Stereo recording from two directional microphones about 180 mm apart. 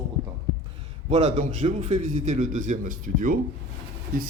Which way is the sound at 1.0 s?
35° right (ahead or behind).